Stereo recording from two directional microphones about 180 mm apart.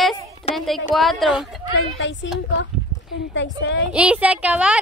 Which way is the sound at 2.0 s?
90° left.